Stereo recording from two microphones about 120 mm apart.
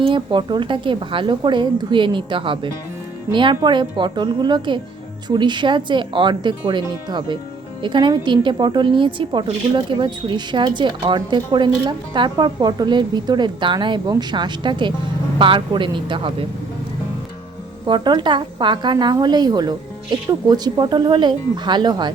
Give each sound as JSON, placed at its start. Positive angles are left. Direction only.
{"t": 0.0, "sound": "a woman's voice", "side_deg": -45}
{"t": 17.8, "sound": "speech", "side_deg": -40}